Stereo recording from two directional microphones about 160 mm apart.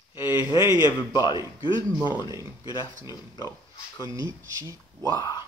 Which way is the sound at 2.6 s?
25° left (ahead or behind).